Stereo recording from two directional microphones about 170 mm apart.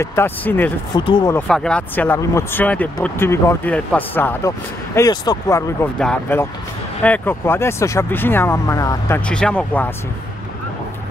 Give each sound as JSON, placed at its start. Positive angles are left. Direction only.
{"t": 0.0, "sound": "speech", "side_deg": 15}
{"t": 0.9, "sound": "speech", "side_deg": 25}
{"t": 1.3, "sound": "speech", "side_deg": 5}
{"t": 9.2, "sound": "speech", "side_deg": 5}